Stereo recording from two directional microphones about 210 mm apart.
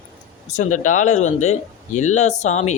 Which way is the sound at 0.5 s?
35° left (ahead or behind).